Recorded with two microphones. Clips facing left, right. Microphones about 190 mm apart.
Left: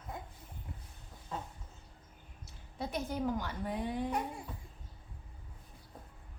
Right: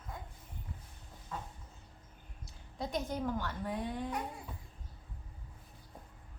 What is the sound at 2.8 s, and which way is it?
A woman's voice, 5° left (ahead or behind).